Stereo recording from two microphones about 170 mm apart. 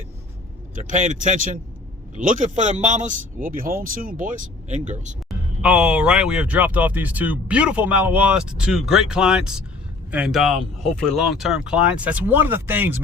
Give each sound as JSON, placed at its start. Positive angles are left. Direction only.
{"t": 0.8, "sound": "speech", "side_deg": -45}
{"t": 5.6, "sound": "speech", "side_deg": -5}